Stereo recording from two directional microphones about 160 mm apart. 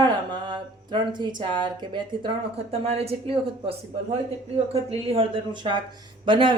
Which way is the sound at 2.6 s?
40° right (ahead or behind).